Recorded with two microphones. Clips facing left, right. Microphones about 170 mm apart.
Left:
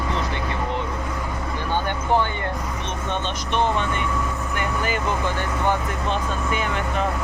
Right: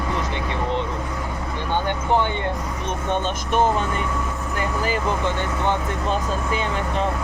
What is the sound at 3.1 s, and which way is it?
Speech, 45° right (ahead or behind).